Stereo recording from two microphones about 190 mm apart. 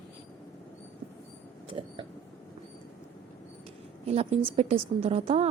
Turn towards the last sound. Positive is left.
turn(degrees=-30)  # may be behind; listen again after turning